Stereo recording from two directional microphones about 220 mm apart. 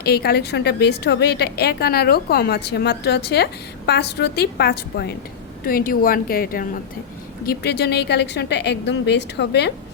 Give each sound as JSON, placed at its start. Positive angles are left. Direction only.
{"t": 0.0, "sound": "a woman's voice", "side_deg": 45}